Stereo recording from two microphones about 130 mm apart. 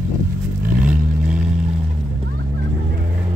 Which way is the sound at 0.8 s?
10° right (ahead or behind).